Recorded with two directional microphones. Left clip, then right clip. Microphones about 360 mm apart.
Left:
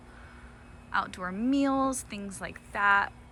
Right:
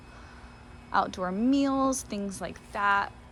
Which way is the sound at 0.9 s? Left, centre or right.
Centre.